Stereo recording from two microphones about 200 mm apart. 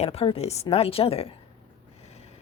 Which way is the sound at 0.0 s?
30° left (ahead or behind).